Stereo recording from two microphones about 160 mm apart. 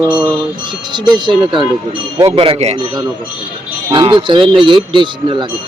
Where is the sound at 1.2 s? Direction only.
30° right (ahead or behind).